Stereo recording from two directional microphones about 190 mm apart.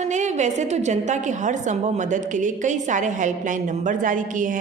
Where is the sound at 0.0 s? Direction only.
40° right (ahead or behind).